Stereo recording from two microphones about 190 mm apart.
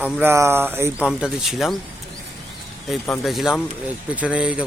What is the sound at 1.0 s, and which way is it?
Speech, centre (ahead or behind).